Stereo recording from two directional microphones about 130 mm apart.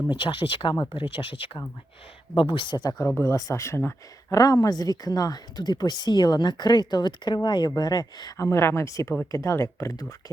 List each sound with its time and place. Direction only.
0.1 s speech: 40° left (ahead or behind)
3.1 s speech: 20° left (ahead or behind)